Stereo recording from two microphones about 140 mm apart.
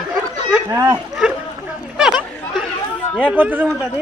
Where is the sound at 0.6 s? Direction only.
25° right (ahead or behind).